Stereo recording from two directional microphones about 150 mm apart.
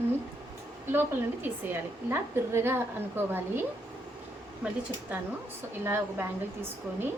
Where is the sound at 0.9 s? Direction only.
15° right (ahead or behind).